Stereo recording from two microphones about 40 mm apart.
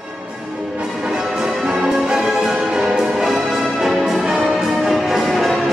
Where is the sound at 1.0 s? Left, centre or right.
Centre.